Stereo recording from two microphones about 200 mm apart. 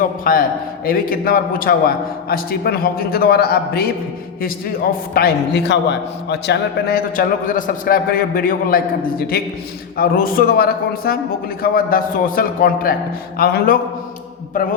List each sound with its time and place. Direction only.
0.0 s a man's voice: 45° left (ahead or behind)
5.1 s a man's voice: 55° left (ahead or behind)